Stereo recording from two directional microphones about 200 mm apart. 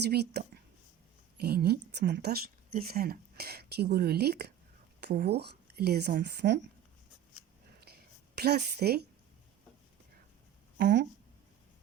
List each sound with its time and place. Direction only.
0.0 s speech: 55° right (ahead or behind)
7.9 s a sound: 55° right (ahead or behind)
8.4 s speech: 55° right (ahead or behind)
10.8 s speech: 55° right (ahead or behind)